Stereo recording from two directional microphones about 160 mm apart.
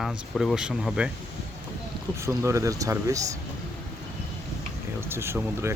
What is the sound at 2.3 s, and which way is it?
Speech, 15° right (ahead or behind).